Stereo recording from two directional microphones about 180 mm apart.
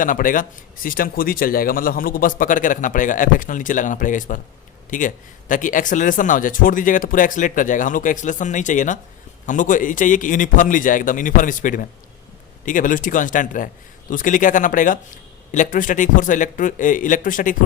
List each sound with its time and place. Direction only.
0.0 s speech: 50° left (ahead or behind)